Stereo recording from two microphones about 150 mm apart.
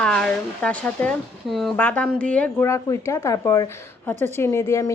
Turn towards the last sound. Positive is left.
turn(degrees=20)  # may be behind; listen again after turning